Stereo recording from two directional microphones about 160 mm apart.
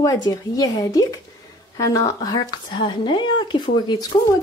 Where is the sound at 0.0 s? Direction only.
20° left (ahead or behind).